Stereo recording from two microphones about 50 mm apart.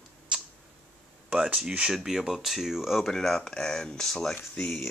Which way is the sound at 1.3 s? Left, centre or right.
Right.